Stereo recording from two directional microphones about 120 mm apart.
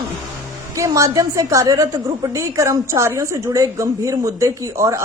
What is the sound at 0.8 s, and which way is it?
A woman's voice, 25° right (ahead or behind).